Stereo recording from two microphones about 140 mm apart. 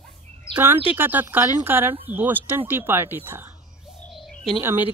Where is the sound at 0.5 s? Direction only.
15° right (ahead or behind).